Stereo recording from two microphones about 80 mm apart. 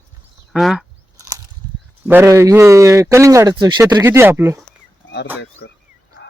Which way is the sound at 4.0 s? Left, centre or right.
Right.